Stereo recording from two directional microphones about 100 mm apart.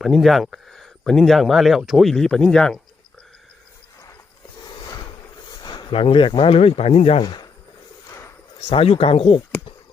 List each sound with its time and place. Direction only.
0.0 s speech: centre (ahead or behind)
4.7 s a sound: 45° left (ahead or behind)
5.9 s speech: 65° left (ahead or behind)
8.7 s speech: 70° left (ahead or behind)